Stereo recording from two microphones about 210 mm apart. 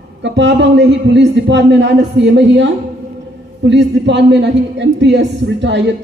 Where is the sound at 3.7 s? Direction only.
55° right (ahead or behind).